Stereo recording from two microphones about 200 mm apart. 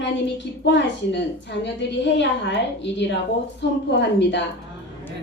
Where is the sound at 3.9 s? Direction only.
60° left (ahead or behind).